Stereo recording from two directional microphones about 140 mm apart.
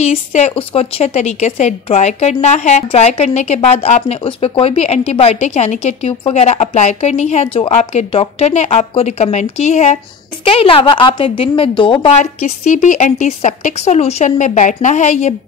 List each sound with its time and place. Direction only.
0.0 s a woman's voice: 50° left (ahead or behind)
10.4 s a woman's voice: 40° left (ahead or behind)
12.1 s a woman's voice: 55° left (ahead or behind)